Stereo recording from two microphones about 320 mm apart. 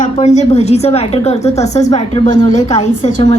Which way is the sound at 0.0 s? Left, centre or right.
Left.